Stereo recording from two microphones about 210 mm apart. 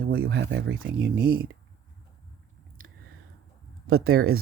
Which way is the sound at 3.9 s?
90° right.